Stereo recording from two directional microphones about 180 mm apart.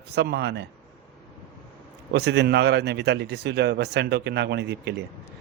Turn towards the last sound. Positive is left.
turn(degrees=-70)  # may be behind; listen again after turning